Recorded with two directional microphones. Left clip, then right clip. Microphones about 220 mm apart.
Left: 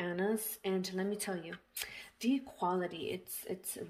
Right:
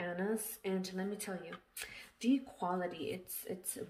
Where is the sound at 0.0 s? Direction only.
40° left (ahead or behind).